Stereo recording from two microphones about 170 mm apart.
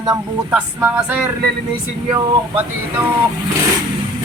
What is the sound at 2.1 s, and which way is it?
Speech, 30° right (ahead or behind).